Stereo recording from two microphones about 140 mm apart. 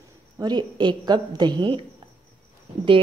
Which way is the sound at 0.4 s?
30° right (ahead or behind).